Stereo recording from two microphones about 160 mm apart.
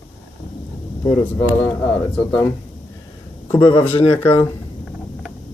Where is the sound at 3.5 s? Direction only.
15° left (ahead or behind).